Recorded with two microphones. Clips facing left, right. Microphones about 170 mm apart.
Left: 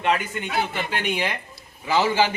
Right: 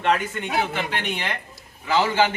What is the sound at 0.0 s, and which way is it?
Speech, 5° left (ahead or behind).